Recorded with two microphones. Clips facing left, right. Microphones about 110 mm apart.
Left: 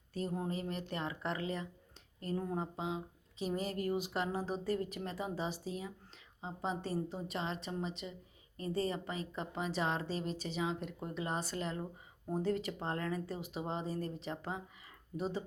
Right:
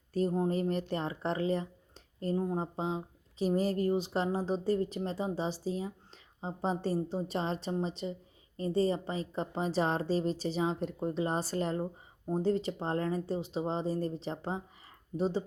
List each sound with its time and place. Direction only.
0.1 s a woman's voice: 40° right (ahead or behind)
2.7 s a woman's voice: 35° right (ahead or behind)